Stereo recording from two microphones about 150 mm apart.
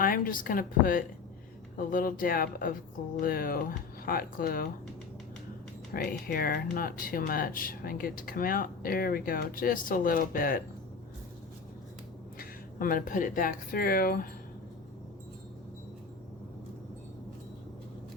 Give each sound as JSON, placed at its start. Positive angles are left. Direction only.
{"t": 0.0, "sound": "a woman's voice", "side_deg": 75}
{"t": 5.9, "sound": "speech", "side_deg": 90}
{"t": 12.4, "sound": "speech", "side_deg": 70}